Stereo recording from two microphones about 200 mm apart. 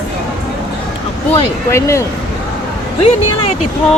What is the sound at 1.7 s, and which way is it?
Speech, 15° left (ahead or behind).